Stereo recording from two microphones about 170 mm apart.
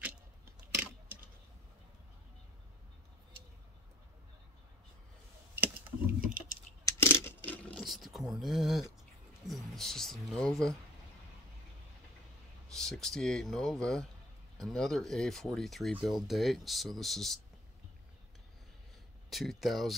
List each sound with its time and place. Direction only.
0.0 s a sound: 10° right (ahead or behind)
5.8 s typing: 55° right (ahead or behind)
6.8 s coin: 15° left (ahead or behind); by 8.8 s centre (ahead or behind)
9.5 s speech: centre (ahead or behind)
12.7 s speech: 5° left (ahead or behind)
19.3 s speech: centre (ahead or behind)